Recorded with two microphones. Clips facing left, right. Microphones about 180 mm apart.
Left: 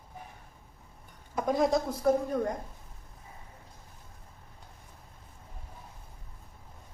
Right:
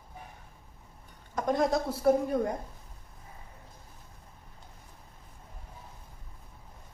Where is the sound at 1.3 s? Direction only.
Centre (ahead or behind).